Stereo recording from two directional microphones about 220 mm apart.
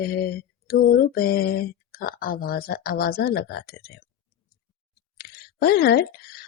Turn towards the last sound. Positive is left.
turn(degrees=45)  # may be behind; listen again after turning